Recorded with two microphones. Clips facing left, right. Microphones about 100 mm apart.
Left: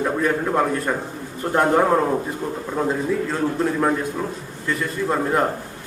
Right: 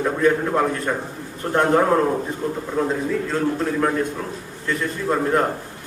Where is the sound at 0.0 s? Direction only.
5° left (ahead or behind).